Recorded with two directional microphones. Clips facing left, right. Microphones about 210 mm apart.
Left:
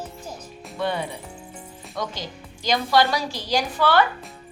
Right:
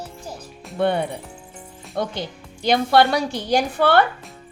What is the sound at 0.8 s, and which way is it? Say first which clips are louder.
A woman's voice: right 6 dB; 55° right (ahead or behind).